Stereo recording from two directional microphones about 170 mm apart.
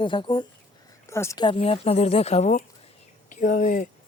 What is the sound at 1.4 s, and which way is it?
Speech, 35° left (ahead or behind).